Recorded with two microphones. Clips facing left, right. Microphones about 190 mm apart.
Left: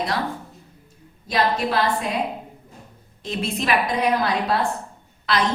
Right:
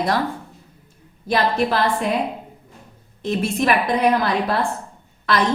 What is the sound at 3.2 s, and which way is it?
Speech, 50° right (ahead or behind).